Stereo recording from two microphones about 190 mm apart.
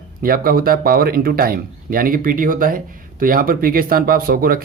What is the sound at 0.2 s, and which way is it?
Speech, 50° right (ahead or behind).